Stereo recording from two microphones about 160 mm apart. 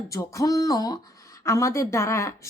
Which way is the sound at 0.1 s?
20° left (ahead or behind).